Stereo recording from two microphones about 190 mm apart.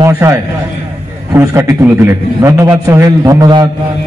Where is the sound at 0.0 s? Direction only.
15° right (ahead or behind).